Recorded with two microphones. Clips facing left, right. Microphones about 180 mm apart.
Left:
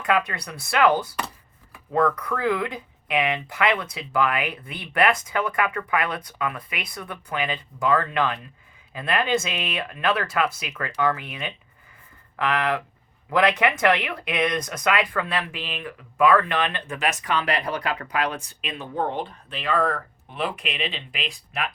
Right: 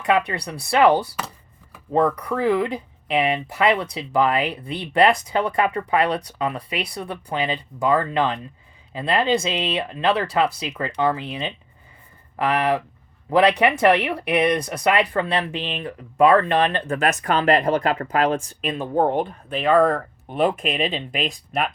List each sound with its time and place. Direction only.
0.0 s speech: 25° right (ahead or behind); by 21.7 s 45° right (ahead or behind)